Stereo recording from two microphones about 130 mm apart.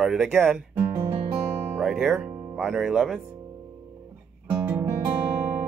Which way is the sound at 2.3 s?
30° right (ahead or behind).